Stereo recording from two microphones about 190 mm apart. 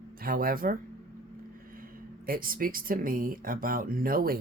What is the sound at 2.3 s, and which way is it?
Speech, 50° right (ahead or behind).